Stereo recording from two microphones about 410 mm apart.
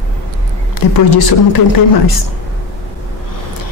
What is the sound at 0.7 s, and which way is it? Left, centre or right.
Speech, left.